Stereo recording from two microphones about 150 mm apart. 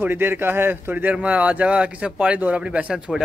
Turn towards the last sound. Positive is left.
turn(degrees=-5)  # may be behind; listen again after turning